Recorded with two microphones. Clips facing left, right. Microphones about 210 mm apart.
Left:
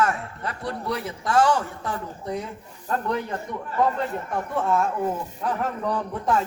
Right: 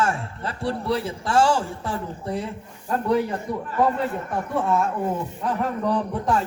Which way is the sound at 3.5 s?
35° right (ahead or behind).